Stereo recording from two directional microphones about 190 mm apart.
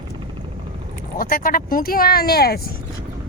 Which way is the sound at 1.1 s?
50° left (ahead or behind).